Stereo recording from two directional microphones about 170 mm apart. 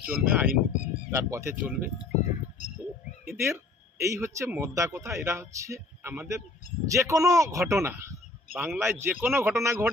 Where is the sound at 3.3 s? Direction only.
15° right (ahead or behind).